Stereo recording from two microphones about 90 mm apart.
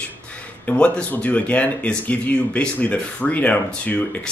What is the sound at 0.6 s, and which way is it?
Speech, 10° left (ahead or behind).